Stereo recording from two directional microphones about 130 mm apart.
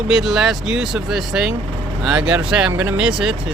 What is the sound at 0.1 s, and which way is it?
Speech, 5° right (ahead or behind).